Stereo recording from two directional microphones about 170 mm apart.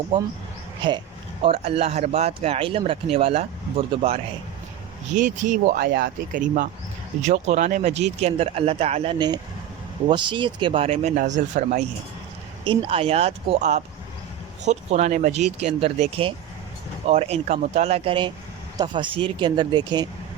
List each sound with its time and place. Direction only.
0.1 s speech: 30° right (ahead or behind)
5.1 s speech: 50° right (ahead or behind)
12.6 s speech: 30° right (ahead or behind)